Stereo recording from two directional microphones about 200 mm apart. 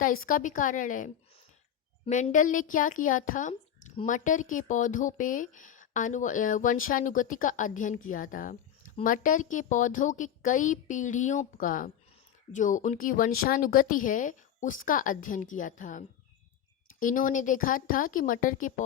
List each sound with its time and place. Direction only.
0.0 s a woman's voice: 45° left (ahead or behind)